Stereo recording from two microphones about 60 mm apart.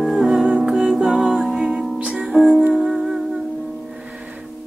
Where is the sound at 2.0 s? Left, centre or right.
Centre.